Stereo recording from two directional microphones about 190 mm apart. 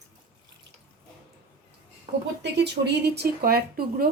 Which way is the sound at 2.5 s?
60° right (ahead or behind).